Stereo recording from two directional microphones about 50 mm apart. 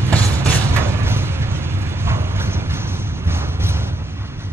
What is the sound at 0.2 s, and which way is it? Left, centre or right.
Vehicle, right.